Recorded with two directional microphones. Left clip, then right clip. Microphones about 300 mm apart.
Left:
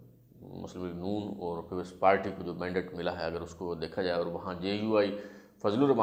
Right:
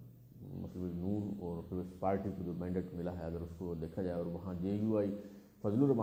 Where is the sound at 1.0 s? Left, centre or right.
Left.